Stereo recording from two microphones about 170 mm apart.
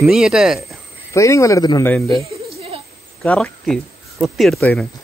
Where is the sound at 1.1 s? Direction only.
15° left (ahead or behind).